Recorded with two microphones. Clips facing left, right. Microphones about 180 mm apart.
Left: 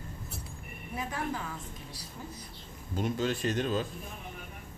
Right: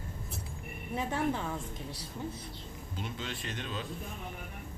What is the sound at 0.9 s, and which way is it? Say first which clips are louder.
Speech: right 3 dB; 25° right (ahead or behind).